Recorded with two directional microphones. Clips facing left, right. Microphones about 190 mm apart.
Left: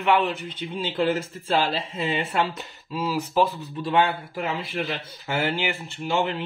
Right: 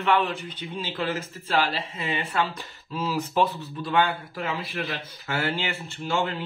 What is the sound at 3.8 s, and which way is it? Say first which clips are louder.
A man's voice: left 2 dB; 25° left (ahead or behind).